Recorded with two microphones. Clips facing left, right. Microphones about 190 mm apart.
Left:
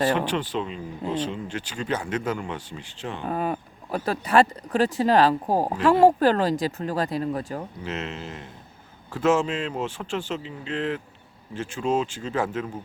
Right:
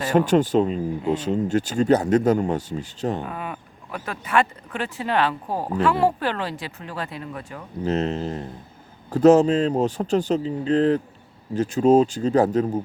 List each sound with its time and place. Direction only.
0.1 s speech: 45° right (ahead or behind)
3.2 s speech: 35° left (ahead or behind)
7.9 s speech: 35° right (ahead or behind)